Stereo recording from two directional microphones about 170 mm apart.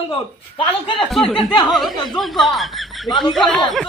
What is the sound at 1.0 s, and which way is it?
Speech, centre (ahead or behind).